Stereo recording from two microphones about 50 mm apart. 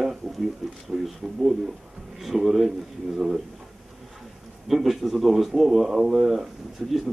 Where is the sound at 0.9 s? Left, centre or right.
Centre.